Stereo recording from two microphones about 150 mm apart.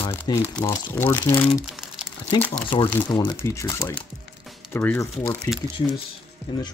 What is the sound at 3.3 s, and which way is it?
Speech, 20° left (ahead or behind).